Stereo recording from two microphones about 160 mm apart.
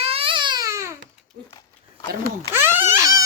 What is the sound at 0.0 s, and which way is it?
Baby cry, 35° right (ahead or behind).